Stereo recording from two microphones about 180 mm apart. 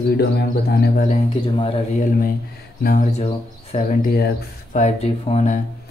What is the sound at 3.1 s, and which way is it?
Speech, 35° left (ahead or behind).